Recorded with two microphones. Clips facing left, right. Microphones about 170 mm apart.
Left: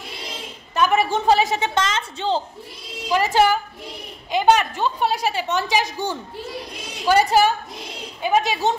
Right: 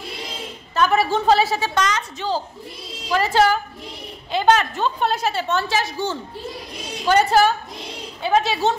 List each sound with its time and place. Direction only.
0.7 s a woman's voice: 15° left (ahead or behind)
3.1 s a woman's voice: 15° left (ahead or behind)